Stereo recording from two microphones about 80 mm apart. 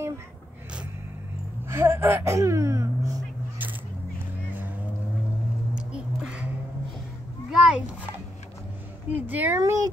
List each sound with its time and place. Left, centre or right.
1.7 s speech: right
5.8 s music: centre
7.5 s a sound: centre
9.1 s speech: right
9.6 s speech: right